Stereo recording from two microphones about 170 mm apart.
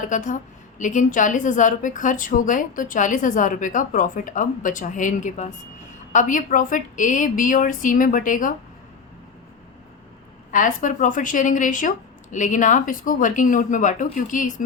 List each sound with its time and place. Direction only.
0.1 s a woman's voice: 50° left (ahead or behind)
10.5 s a woman's voice: 50° left (ahead or behind)